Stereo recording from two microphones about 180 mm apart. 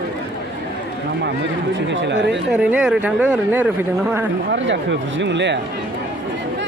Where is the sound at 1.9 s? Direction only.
85° right.